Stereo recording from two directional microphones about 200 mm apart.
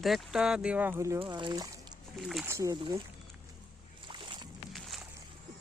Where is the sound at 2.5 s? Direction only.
15° right (ahead or behind).